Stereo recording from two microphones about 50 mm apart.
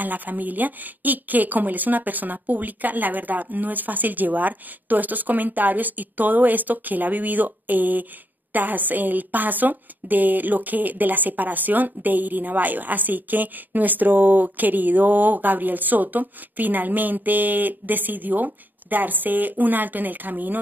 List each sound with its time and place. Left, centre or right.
0.0 s a woman's voice: right